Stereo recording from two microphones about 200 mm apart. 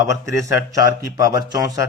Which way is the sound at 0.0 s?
15° right (ahead or behind).